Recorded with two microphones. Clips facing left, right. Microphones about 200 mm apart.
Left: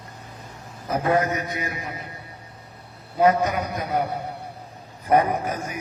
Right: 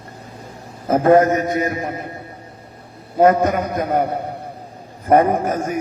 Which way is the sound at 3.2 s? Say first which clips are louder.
Right 5 dB; 50° right (ahead or behind).